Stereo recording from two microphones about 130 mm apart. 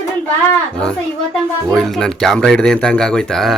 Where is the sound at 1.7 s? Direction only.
5° left (ahead or behind).